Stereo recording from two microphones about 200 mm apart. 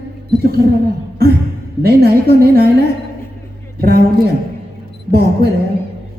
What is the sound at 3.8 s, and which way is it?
Speech, 50° right (ahead or behind).